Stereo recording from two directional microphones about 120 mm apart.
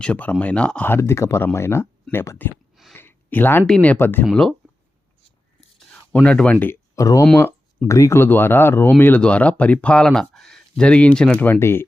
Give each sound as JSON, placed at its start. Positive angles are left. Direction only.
{"t": 0.0, "sound": "speech", "side_deg": 10}
{"t": 2.9, "sound": "a sound", "side_deg": 15}
{"t": 3.7, "sound": "speech", "side_deg": 10}
{"t": 4.3, "sound": "speech", "side_deg": 5}
{"t": 5.9, "sound": "speech", "side_deg": 10}